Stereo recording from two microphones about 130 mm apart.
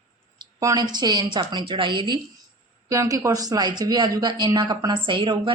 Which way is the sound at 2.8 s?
25° right (ahead or behind).